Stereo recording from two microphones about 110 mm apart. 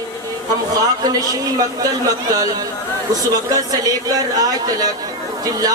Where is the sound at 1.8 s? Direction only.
35° right (ahead or behind).